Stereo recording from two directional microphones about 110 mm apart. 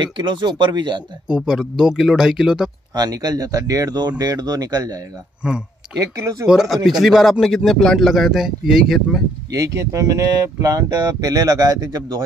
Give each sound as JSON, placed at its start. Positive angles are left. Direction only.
{"t": 0.0, "sound": "speech", "side_deg": -45}
{"t": 1.2, "sound": "speech", "side_deg": -5}
{"t": 2.9, "sound": "speech", "side_deg": -35}
{"t": 5.4, "sound": "speech", "side_deg": -10}
{"t": 5.9, "sound": "speech", "side_deg": -30}
{"t": 6.4, "sound": "speech", "side_deg": -5}
{"t": 9.5, "sound": "speech", "side_deg": -30}